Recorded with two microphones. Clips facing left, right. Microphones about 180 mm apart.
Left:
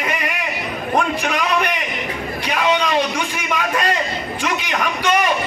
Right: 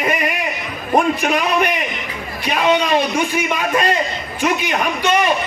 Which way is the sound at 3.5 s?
10° right (ahead or behind).